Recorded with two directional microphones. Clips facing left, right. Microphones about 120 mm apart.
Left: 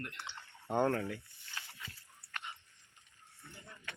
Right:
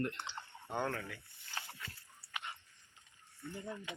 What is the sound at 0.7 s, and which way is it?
Speech, 35° left (ahead or behind).